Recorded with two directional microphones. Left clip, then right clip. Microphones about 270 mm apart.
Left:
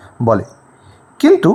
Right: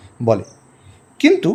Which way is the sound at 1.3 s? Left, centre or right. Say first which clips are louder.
Left 5 dB; centre.